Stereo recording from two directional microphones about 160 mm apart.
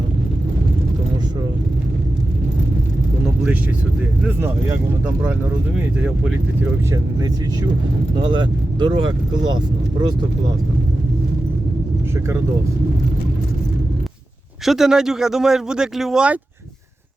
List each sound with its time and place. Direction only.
4.2 s speech: 10° right (ahead or behind)
5.7 s speech: 5° right (ahead or behind)
8.2 s speech: 30° right (ahead or behind)
14.6 s speech: centre (ahead or behind)